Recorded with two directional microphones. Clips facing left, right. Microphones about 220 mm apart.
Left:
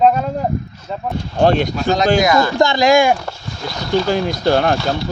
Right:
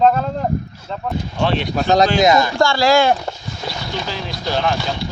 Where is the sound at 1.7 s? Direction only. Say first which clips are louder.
Right 2 dB; 40° right (ahead or behind).